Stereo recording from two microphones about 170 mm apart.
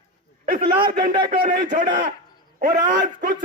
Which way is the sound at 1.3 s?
50° right (ahead or behind).